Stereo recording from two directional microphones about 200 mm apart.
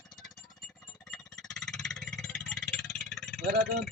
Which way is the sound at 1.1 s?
Centre (ahead or behind).